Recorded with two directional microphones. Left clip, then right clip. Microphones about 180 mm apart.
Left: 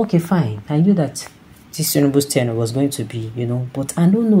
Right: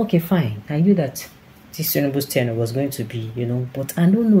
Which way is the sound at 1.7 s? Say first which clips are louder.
Left 5 dB; 20° left (ahead or behind).